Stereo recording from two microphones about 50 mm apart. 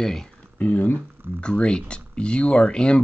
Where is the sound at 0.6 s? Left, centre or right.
Left.